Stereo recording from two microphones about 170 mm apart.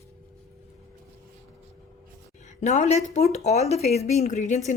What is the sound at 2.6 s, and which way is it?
A woman's voice, 45° left (ahead or behind).